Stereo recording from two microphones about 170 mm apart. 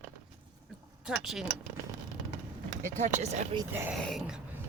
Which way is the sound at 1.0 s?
Centre (ahead or behind).